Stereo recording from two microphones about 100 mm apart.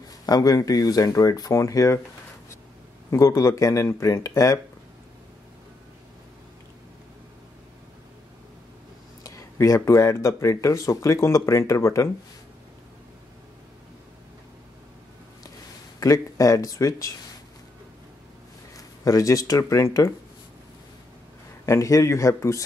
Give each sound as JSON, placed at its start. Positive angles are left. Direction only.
{"t": 0.3, "sound": "speech", "side_deg": 40}
{"t": 3.1, "sound": "speech", "side_deg": 30}
{"t": 9.2, "sound": "a sound", "side_deg": 30}
{"t": 9.8, "sound": "speech", "side_deg": 30}
{"t": 16.0, "sound": "speech", "side_deg": 35}
{"t": 18.8, "sound": "speech", "side_deg": 35}
{"t": 21.6, "sound": "speech", "side_deg": 35}